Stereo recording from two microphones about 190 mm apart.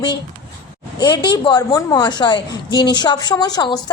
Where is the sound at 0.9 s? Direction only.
20° left (ahead or behind).